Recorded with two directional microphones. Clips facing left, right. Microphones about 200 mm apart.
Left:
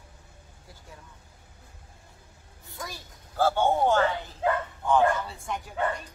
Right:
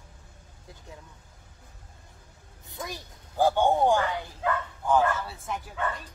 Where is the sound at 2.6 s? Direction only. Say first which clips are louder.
Right 3 dB; 20° right (ahead or behind); by 5.7 s 5° right (ahead or behind).